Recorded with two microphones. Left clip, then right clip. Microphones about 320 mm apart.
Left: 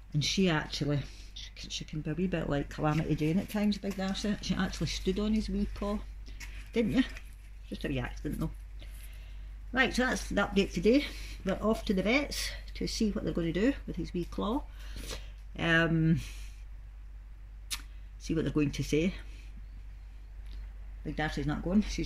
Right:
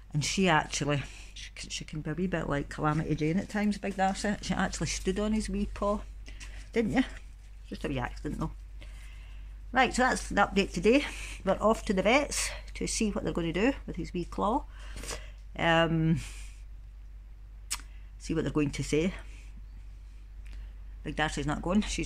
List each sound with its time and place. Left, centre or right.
0.1 s speech: centre
6.2 s a sound: centre
7.6 s speech: centre
17.6 s camera: centre
21.0 s speech: centre